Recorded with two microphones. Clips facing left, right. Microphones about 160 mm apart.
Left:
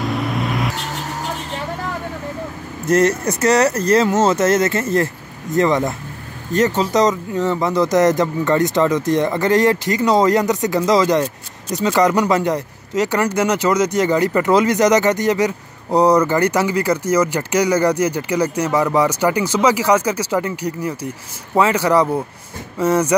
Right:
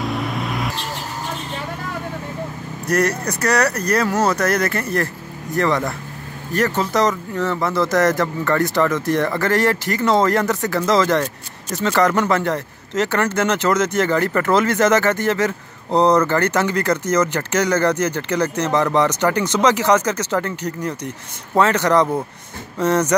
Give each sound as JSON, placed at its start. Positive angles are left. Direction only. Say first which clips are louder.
{"t": 0.0, "sound": "vehicle", "louder": "left 2 dB", "side_deg": 0}
{"t": 2.9, "sound": "speech", "louder": "left 4 dB", "side_deg": 25}